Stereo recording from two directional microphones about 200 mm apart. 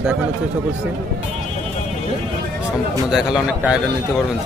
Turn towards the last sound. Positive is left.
turn(degrees=-5)  # may be behind; listen again after turning